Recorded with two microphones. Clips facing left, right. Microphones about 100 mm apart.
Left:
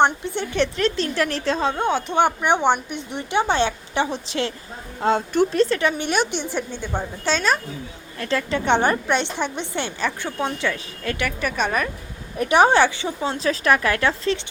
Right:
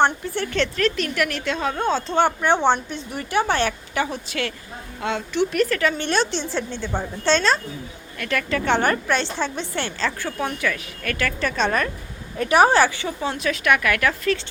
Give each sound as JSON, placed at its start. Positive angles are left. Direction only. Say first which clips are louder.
{"t": 0.0, "sound": "a woman's voice", "louder": "left 1 dB", "side_deg": 20}
{"t": 1.7, "sound": "a woman's voice", "louder": "even", "side_deg": 15}
{"t": 4.9, "sound": "speech", "louder": "left 4 dB", "side_deg": 40}
{"t": 5.5, "sound": "a woman's voice", "louder": "left 1 dB", "side_deg": 25}
{"t": 8.2, "sound": "a woman's voice", "louder": "left 1 dB", "side_deg": 25}
{"t": 12.4, "sound": "a woman's voice", "louder": "even", "side_deg": 20}